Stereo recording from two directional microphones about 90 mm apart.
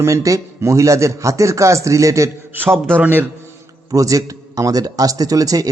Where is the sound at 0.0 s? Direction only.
35° right (ahead or behind).